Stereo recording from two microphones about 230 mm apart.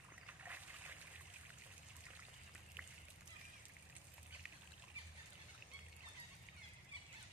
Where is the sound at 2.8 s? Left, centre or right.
Centre.